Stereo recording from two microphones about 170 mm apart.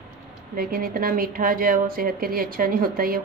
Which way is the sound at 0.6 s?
60° right (ahead or behind).